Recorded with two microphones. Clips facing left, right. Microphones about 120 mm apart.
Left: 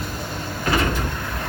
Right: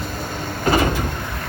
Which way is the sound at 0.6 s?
30° right (ahead or behind).